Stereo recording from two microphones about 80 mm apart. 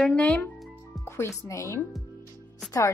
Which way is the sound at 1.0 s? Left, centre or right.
Left.